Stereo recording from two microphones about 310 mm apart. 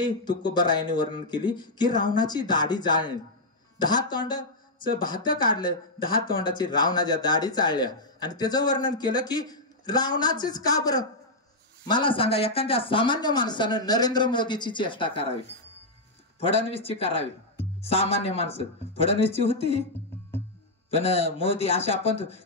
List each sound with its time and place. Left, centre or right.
0.0 s a man's voice: centre
4.7 s speech: left
6.4 s a man's voice: centre
16.4 s speech: centre
20.9 s speech: centre